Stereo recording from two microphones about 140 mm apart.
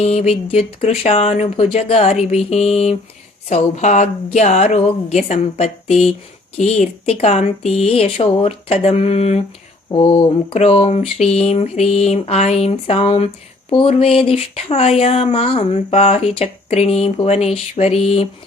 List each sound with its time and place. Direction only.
0.0 s speech: 50° left (ahead or behind)